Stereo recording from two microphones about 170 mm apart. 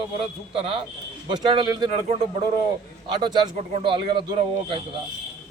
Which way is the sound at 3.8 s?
30° right (ahead or behind).